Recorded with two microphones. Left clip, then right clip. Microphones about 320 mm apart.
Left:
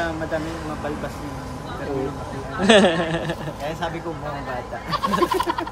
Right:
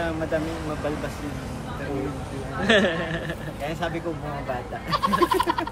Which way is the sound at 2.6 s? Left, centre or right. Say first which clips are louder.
Left 5 dB; centre.